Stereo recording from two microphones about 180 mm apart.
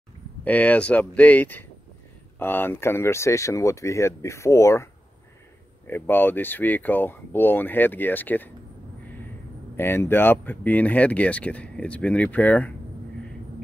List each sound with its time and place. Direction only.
0.4 s speech: 10° left (ahead or behind)
5.9 s speech: 10° left (ahead or behind)
9.8 s speech: 10° left (ahead or behind)